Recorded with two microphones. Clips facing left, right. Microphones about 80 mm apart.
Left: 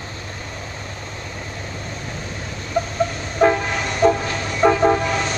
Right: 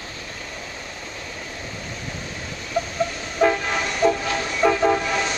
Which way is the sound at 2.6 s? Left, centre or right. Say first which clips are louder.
Left 3 dB; left.